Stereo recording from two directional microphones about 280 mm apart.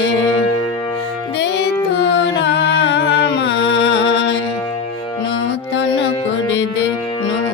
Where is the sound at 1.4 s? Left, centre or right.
Left.